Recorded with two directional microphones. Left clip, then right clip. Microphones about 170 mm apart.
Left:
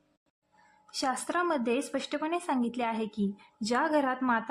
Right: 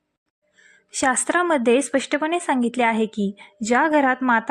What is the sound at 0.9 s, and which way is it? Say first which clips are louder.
A woman's voice: right 10 dB; 40° right (ahead or behind).